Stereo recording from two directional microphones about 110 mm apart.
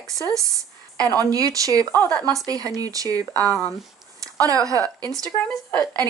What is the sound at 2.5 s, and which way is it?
Speech, 35° right (ahead or behind).